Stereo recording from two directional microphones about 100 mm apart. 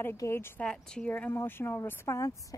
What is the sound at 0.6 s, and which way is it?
A woman's voice, 10° left (ahead or behind).